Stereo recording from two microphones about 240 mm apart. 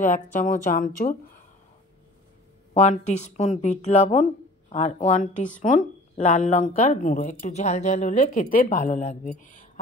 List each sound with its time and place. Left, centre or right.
0.0 s a woman's voice: left
2.7 s a woman's voice: left